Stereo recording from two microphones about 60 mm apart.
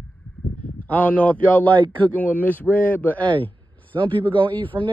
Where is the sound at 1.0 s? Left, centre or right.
Left.